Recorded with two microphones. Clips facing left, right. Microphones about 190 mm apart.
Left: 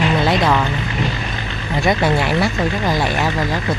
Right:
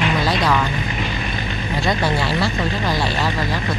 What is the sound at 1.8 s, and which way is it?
Speech, 20° left (ahead or behind).